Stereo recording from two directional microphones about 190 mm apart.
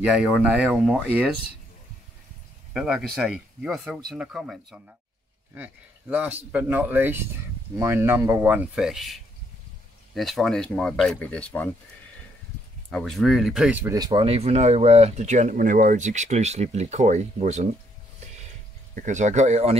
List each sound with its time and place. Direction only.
0.0 s speech: 5° right (ahead or behind)
2.7 s speech: centre (ahead or behind)
12.9 s speech: centre (ahead or behind)
13.9 s speech: 25° right (ahead or behind)
18.9 s speech: 40° right (ahead or behind)